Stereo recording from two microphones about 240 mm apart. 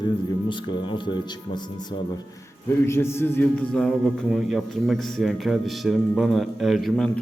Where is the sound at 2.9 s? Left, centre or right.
Centre.